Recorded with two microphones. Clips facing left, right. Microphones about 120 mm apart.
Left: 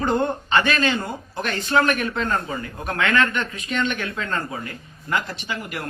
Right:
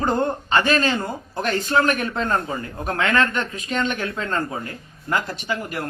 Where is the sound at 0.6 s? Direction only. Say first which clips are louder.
Right 2 dB; 35° right (ahead or behind).